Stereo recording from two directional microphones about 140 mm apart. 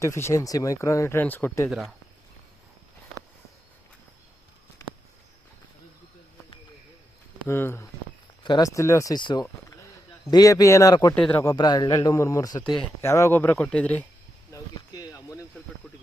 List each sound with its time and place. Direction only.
0.0 s speech: 20° left (ahead or behind)
7.4 s speech: 15° left (ahead or behind)
8.4 s speech: 30° left (ahead or behind)
11.1 s speech: 10° left (ahead or behind)
11.4 s speech: 30° left (ahead or behind); by 14.1 s 10° left (ahead or behind)
14.5 s a sound: 25° left (ahead or behind)